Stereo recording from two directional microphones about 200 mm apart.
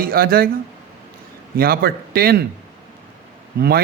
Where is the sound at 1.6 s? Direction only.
50° right (ahead or behind).